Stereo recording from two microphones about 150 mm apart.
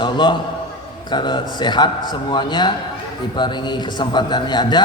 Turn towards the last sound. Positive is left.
turn(degrees=30)  # may be behind; listen again after turning